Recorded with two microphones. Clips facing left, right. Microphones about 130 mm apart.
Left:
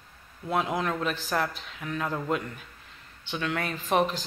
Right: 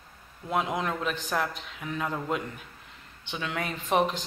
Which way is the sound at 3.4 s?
10° right (ahead or behind).